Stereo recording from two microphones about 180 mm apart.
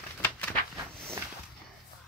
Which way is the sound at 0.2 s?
10° left (ahead or behind).